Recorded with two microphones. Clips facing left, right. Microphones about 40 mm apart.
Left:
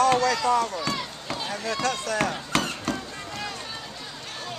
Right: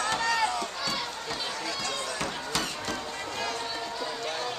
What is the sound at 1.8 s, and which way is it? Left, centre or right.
Run, left.